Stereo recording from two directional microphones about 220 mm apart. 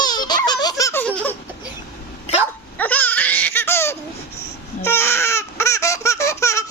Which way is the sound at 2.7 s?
5° left (ahead or behind).